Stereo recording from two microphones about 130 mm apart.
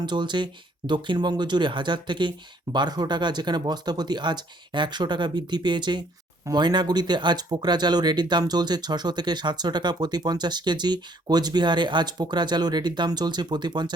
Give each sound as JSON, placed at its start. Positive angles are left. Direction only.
{"t": 0.0, "sound": "speech", "side_deg": -35}